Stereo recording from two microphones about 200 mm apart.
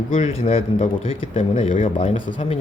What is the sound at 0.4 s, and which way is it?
Speech, 35° left (ahead or behind).